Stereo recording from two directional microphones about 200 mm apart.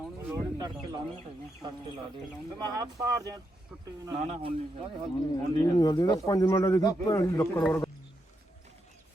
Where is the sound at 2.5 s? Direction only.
20° right (ahead or behind).